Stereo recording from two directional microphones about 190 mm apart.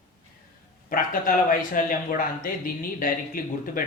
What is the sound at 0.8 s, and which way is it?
Speech, 45° left (ahead or behind).